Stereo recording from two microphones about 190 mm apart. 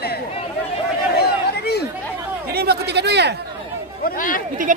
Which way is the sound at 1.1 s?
55° left (ahead or behind).